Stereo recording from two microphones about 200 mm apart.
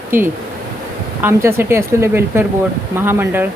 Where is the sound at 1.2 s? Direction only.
10° right (ahead or behind).